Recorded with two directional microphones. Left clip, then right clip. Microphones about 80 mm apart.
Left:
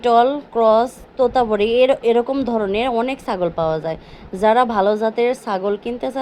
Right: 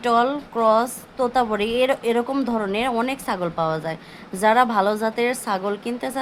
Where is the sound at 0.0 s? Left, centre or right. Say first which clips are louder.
Left 5 dB; left.